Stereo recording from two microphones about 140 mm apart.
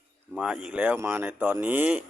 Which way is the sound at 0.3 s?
5° right (ahead or behind).